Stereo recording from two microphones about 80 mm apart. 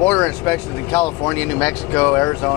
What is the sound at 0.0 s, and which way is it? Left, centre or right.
Speech, centre.